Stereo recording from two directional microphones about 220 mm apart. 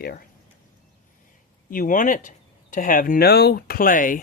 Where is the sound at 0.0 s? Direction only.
45° left (ahead or behind).